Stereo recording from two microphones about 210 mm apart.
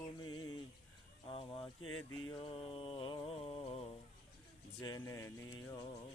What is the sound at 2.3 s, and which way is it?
Mantra, 25° left (ahead or behind).